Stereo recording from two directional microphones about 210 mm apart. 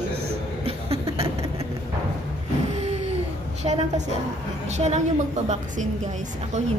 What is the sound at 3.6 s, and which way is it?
A woman's voice, 30° right (ahead or behind).